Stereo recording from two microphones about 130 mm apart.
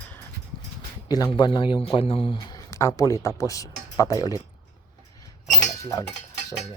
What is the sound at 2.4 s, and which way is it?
Speech, 30° left (ahead or behind).